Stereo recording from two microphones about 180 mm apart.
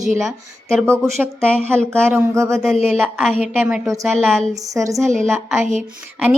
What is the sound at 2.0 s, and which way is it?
A woman's voice, 15° right (ahead or behind).